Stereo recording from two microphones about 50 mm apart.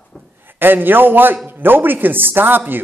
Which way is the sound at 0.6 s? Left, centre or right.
Right.